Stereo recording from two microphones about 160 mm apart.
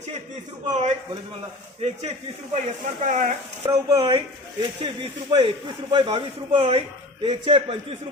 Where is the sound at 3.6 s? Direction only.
20° right (ahead or behind).